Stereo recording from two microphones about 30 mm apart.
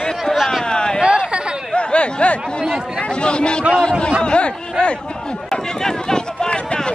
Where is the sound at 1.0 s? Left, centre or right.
Right.